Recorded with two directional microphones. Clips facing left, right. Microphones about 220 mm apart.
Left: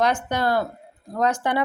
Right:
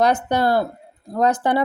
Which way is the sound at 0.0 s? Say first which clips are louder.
Right 4 dB; 35° right (ahead or behind).